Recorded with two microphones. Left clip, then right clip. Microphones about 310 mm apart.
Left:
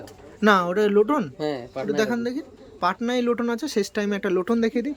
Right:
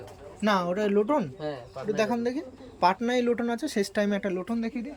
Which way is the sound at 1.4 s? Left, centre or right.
Left.